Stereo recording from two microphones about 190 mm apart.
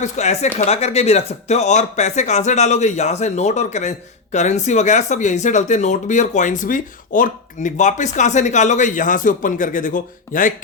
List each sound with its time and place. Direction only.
0.0 s speech: 35° left (ahead or behind)